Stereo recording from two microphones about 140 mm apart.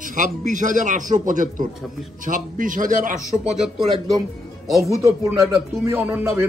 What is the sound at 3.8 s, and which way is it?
A man's voice, 30° right (ahead or behind).